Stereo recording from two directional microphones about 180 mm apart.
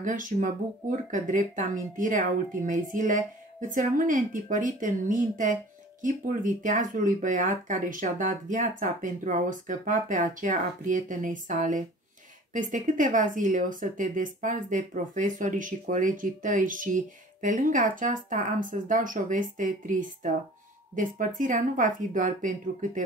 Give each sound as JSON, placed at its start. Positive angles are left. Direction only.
{"t": 0.0, "sound": "a woman's voice", "side_deg": -45}